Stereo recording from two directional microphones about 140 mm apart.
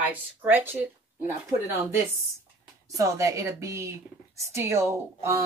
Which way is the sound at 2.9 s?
25° right (ahead or behind).